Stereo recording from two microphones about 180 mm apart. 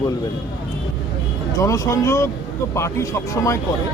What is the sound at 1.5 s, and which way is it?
Speech, 20° left (ahead or behind).